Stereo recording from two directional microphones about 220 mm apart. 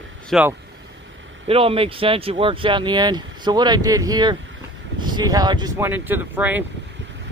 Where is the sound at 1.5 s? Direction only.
25° right (ahead or behind); by 6.6 s 10° right (ahead or behind).